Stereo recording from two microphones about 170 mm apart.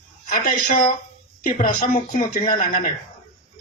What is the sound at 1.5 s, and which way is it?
Speech, 50° left (ahead or behind).